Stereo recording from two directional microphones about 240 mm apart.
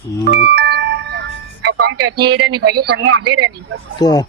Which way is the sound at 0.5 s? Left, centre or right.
Right.